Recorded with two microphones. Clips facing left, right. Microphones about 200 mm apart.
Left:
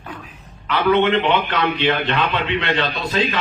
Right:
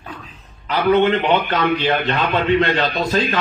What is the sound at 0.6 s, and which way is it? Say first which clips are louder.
A man's voice: right 1 dB; 40° right (ahead or behind).